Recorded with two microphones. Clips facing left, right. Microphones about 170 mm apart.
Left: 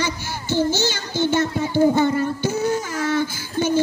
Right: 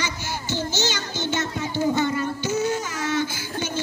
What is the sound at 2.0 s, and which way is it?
Child singing, 50° left (ahead or behind).